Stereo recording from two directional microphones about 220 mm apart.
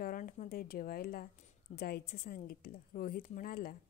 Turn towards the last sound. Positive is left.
turn(degrees=40)  # may be behind; listen again after turning